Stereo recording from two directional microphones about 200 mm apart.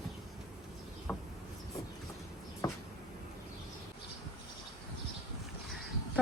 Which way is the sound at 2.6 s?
20° left (ahead or behind).